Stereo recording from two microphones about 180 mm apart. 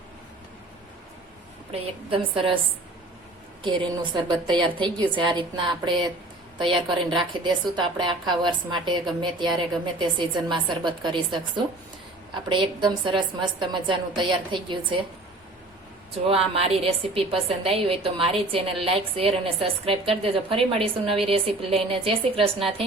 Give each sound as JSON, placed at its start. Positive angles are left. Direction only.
{"t": 1.7, "sound": "a woman's voice", "side_deg": -30}
{"t": 3.6, "sound": "a woman's voice", "side_deg": -25}
{"t": 16.2, "sound": "a woman's voice", "side_deg": -35}